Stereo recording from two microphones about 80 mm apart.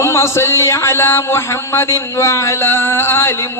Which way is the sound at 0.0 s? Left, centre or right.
Left.